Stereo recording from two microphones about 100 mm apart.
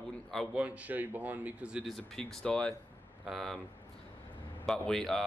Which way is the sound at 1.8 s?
5° left (ahead or behind).